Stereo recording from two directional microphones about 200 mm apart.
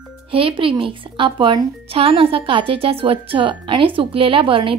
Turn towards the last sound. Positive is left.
turn(degrees=-25)  # may be behind; listen again after turning